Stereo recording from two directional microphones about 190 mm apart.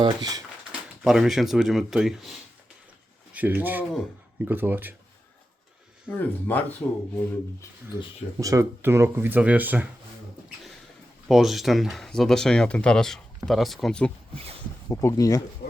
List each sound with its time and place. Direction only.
0.0 s speech: 20° right (ahead or behind)
0.7 s speech: centre (ahead or behind)
6.1 s speech: 10° left (ahead or behind)
8.4 s speech: 15° right (ahead or behind)
11.3 s speech: centre (ahead or behind)
14.8 s speech: 20° left (ahead or behind)